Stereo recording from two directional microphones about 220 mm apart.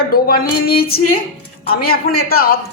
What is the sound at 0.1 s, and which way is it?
Speech, 40° left (ahead or behind).